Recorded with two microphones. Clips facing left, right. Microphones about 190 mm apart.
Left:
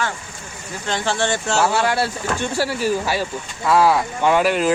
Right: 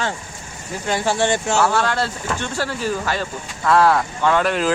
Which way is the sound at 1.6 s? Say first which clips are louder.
Left 4 dB; 10° left (ahead or behind).